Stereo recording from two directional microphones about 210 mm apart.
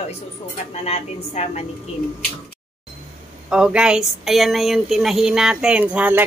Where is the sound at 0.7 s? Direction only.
30° left (ahead or behind).